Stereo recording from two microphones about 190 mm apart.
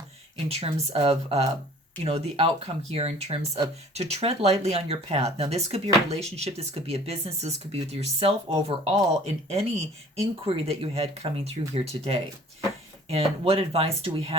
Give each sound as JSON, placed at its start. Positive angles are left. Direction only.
{"t": 0.3, "sound": "speech", "side_deg": -30}